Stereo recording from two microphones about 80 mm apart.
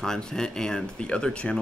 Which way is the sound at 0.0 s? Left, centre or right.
Centre.